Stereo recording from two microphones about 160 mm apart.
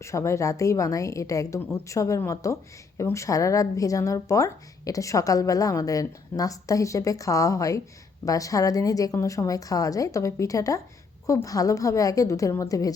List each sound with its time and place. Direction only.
0.0 s speech: 20° left (ahead or behind)